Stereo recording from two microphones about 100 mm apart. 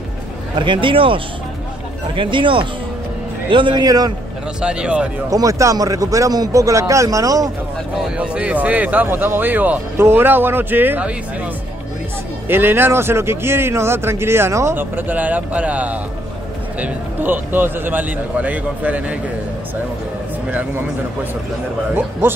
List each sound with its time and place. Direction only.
0.6 s a man's voice: 55° right (ahead or behind)
3.8 s speech: 40° right (ahead or behind)
4.6 s a man's voice: 10° right (ahead or behind)
5.3 s speech: 35° right (ahead or behind)
8.2 s a man's voice: 10° right (ahead or behind)
12.4 s a man's voice: 20° right (ahead or behind)
20.5 s a man's voice: 20° right (ahead or behind)